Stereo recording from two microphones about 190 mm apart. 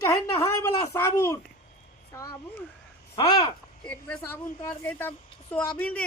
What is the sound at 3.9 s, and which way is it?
Speech, 10° left (ahead or behind).